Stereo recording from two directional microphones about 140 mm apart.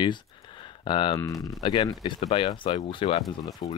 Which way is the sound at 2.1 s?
50° left (ahead or behind).